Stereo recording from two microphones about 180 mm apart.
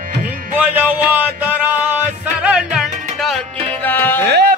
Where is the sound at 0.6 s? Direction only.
10° right (ahead or behind).